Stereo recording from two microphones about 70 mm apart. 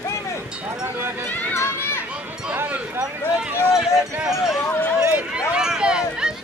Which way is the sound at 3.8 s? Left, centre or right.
Centre.